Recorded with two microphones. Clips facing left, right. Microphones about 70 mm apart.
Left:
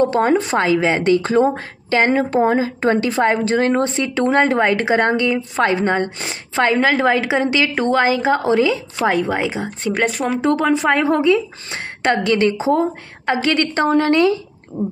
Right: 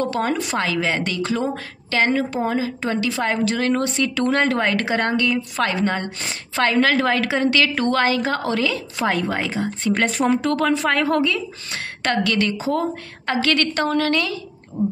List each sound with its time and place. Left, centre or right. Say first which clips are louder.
0.0 s speech: left 7 dB; left
2.1 s a woman's voice: left 6 dB; left; by 10.0 s centre
10.0 s speech: right 1 dB; centre
10.4 s speech: left 3 dB; centre
14.8 s speech: right 1 dB; centre